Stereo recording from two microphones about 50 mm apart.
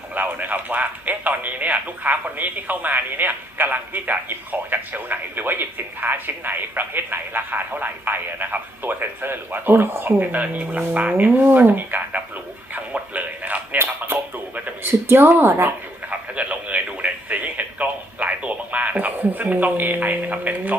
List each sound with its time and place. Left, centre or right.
0.1 s speech: right
10.2 s speech: right
14.8 s a woman's voice: right
16.0 s speech: right